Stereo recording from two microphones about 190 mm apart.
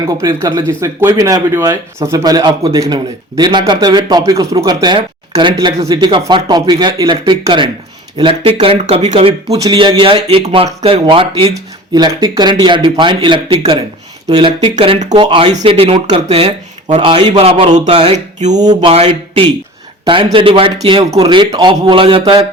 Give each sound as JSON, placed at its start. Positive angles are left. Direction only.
{"t": 0.0, "sound": "speech", "side_deg": -20}
{"t": 18.5, "sound": "speech", "side_deg": -20}